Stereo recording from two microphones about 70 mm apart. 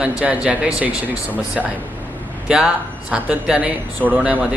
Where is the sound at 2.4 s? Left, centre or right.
Centre.